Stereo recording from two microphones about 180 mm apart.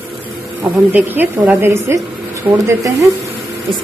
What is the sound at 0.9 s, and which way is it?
Speech, 10° right (ahead or behind).